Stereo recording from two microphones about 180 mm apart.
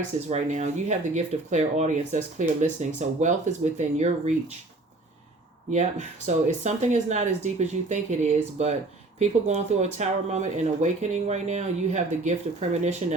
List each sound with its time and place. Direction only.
0.3 s speech: 40° right (ahead or behind)
5.7 s speech: 40° right (ahead or behind)